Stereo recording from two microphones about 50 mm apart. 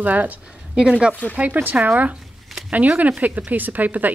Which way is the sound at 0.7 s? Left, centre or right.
Centre.